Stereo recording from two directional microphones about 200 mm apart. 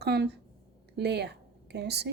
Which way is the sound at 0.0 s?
55° right (ahead or behind).